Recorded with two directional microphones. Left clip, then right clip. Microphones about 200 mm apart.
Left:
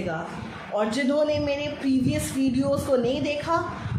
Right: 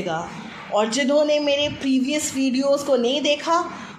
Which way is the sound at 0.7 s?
20° right (ahead or behind).